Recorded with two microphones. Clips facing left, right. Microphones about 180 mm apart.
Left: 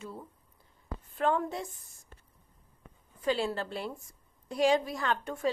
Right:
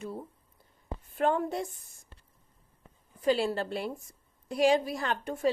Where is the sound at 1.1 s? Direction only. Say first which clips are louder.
Right 2 dB; 40° right (ahead or behind).